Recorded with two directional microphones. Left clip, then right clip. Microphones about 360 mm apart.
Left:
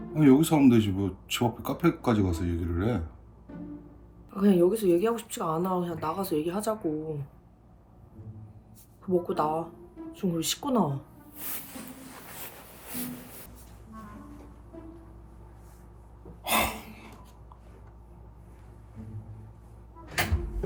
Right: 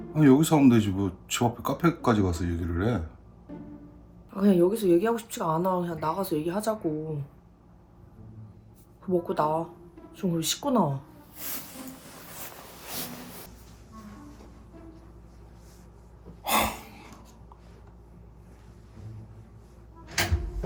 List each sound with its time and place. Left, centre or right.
0.1 s speech: centre
4.4 s speech: centre
9.1 s speech: centre
16.4 s a sound: centre